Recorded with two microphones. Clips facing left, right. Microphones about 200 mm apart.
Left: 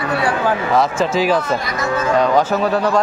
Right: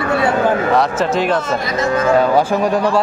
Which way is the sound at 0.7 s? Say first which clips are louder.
Right 1 dB; centre (ahead or behind).